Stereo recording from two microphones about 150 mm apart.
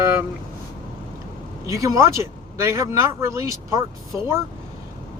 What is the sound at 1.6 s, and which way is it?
Speech, 20° right (ahead or behind).